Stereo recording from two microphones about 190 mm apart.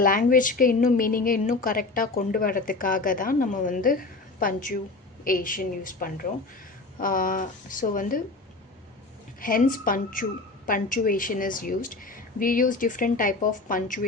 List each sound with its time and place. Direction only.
0.0 s a woman's voice: 45° left (ahead or behind)
9.4 s a woman's voice: 45° left (ahead or behind)